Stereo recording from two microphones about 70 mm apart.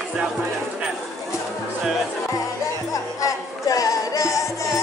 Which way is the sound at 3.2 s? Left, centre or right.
Left.